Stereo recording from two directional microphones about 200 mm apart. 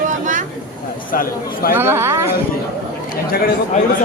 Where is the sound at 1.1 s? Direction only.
45° left (ahead or behind).